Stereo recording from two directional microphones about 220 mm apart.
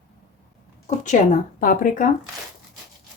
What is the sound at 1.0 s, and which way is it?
Speech, 35° left (ahead or behind).